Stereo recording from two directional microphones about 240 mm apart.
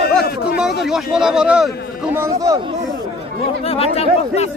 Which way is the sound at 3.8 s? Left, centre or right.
Left.